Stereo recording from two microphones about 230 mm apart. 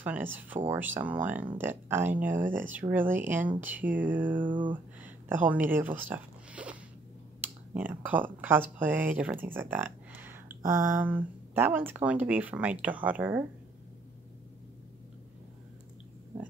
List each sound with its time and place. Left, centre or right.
0.0 s speech: centre
4.5 s a sound: right
5.0 s speech: centre